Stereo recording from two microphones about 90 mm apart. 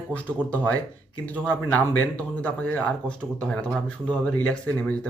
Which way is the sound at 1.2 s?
15° left (ahead or behind).